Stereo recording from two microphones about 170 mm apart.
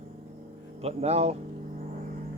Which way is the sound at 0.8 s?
35° right (ahead or behind).